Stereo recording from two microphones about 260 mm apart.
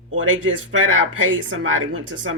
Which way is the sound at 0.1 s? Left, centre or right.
Right.